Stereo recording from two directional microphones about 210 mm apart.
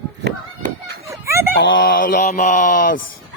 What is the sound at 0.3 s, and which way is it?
Run, 50° right (ahead or behind).